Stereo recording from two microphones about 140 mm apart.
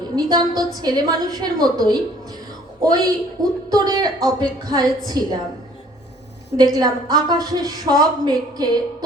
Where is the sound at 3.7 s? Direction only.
30° right (ahead or behind).